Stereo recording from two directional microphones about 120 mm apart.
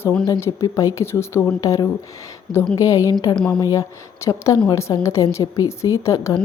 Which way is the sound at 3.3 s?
10° left (ahead or behind).